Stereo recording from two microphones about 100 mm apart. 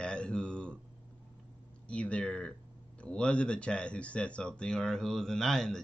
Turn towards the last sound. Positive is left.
turn(degrees=5)  # may be behind; listen again after turning